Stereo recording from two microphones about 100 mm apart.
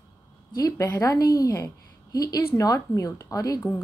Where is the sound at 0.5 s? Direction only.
35° left (ahead or behind).